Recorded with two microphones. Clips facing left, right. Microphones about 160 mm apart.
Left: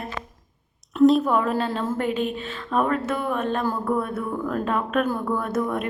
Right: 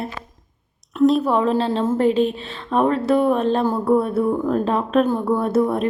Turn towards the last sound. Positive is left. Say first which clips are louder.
# right 7 dB
turn(degrees=-30)  # may be behind; listen again after turning